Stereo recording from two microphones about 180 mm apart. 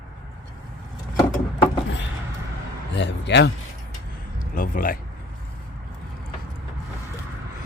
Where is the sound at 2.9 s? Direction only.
75° left (ahead or behind).